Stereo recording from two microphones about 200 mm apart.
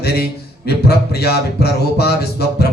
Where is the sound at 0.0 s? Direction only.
55° left (ahead or behind).